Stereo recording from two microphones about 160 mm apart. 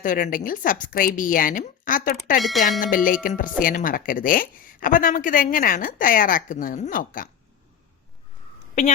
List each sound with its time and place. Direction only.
0.0 s a woman's voice: 55° left (ahead or behind)
2.4 s speech: centre (ahead or behind)
2.8 s a woman's voice: 55° left (ahead or behind)